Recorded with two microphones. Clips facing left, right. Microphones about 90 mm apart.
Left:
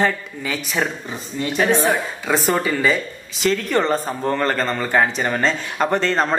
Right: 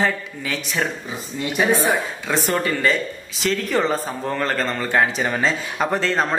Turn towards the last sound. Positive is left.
turn(degrees=0)  # may be behind; listen again after turning